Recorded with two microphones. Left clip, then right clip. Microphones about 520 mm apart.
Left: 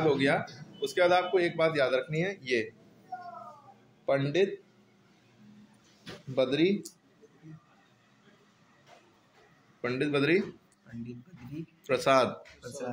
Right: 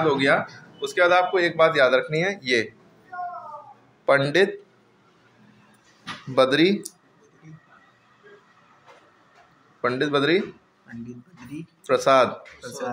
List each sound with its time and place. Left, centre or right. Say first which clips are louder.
0.1 s speech: right 7 dB; left
4.0 s speech: right 9 dB; left
6.3 s speech: right 8 dB; left
9.8 s speech: right 7 dB; left
11.8 s speech: right 7 dB; left